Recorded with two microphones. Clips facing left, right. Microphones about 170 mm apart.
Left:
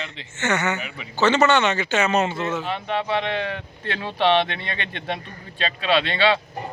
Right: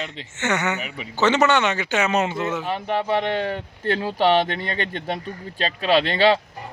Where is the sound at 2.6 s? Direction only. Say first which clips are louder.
Right 2 dB; 40° right (ahead or behind).